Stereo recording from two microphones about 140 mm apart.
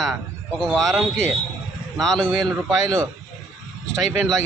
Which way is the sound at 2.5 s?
20° right (ahead or behind).